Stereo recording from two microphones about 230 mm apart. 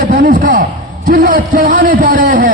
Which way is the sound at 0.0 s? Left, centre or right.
Right.